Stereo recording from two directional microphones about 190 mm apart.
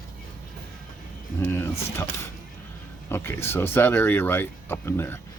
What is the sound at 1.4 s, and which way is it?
Speech, 10° left (ahead or behind).